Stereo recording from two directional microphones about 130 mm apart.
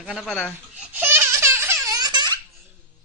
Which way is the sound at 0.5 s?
15° right (ahead or behind).